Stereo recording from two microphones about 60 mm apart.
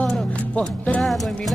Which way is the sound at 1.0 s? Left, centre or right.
Centre.